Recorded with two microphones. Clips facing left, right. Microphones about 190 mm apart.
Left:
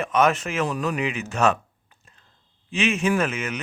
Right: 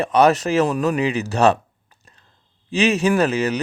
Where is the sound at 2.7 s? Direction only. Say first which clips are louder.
Right 5 dB; 40° right (ahead or behind).